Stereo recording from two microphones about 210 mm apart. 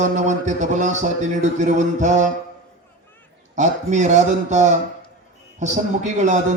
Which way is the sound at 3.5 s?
35° right (ahead or behind).